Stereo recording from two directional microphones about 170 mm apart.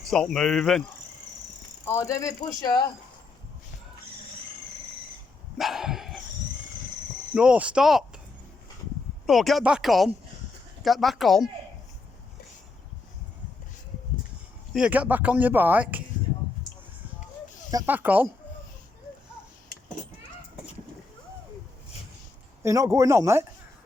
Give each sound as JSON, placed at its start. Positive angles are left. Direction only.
{"t": 0.1, "sound": "speech", "side_deg": 5}
{"t": 1.9, "sound": "speech", "side_deg": 20}
{"t": 5.5, "sound": "dog", "side_deg": 0}
{"t": 7.3, "sound": "speech", "side_deg": -5}
{"t": 9.2, "sound": "speech", "side_deg": 0}
{"t": 14.7, "sound": "speech", "side_deg": -5}
{"t": 17.8, "sound": "speech", "side_deg": -10}
{"t": 22.6, "sound": "speech", "side_deg": -15}